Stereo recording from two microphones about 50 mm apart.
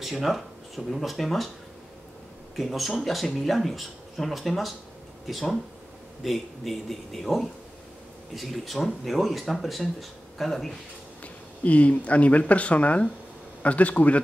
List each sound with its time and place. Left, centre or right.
0.0 s speech: centre
2.5 s speech: centre
11.6 s speech: left